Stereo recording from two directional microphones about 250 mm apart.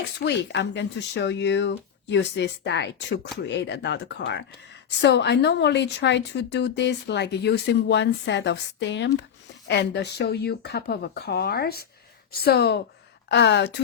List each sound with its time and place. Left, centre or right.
0.2 s a woman's voice: left